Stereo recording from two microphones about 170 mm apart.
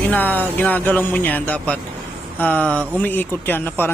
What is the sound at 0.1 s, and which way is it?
Speech, 10° left (ahead or behind).